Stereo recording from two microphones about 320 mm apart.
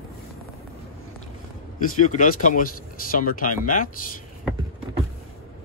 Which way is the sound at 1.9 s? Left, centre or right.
Left.